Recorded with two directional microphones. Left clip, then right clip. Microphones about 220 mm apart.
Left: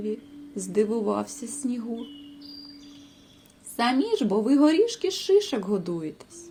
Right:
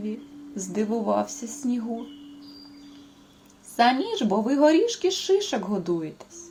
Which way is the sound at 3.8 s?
25° left (ahead or behind).